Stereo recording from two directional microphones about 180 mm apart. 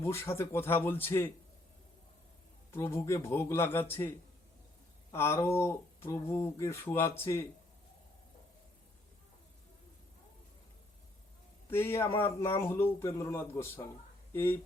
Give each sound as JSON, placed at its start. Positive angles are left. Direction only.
{"t": 0.0, "sound": "speech", "side_deg": 15}
{"t": 2.7, "sound": "speech", "side_deg": 15}
{"t": 5.1, "sound": "speech", "side_deg": 15}
{"t": 11.7, "sound": "speech", "side_deg": 15}